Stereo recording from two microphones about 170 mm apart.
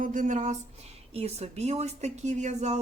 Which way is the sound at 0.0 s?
50° right (ahead or behind).